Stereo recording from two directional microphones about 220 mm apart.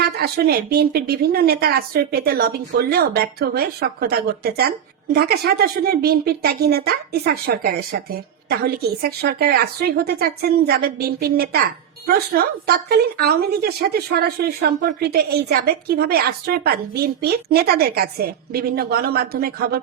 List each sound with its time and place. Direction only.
0.0 s a woman's voice: 45° right (ahead or behind)